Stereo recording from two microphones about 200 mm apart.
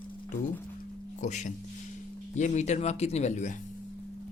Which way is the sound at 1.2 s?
35° left (ahead or behind).